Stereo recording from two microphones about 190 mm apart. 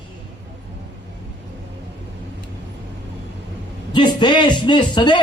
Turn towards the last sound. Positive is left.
turn(degrees=25)  # may be behind; listen again after turning